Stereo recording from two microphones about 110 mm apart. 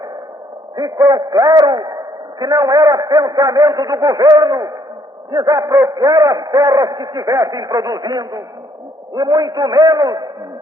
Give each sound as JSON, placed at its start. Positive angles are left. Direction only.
{"t": 0.8, "sound": "a man's voice", "side_deg": -35}